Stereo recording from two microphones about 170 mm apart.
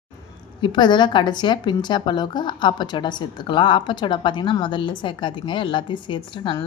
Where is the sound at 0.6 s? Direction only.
25° left (ahead or behind).